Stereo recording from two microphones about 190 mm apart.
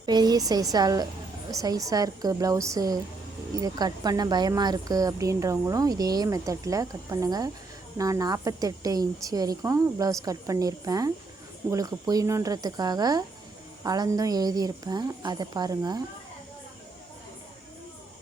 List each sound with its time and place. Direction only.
0.0 s a woman's voice: 20° right (ahead or behind)